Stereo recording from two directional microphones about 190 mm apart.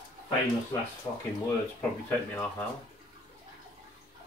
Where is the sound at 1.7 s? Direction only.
10° left (ahead or behind).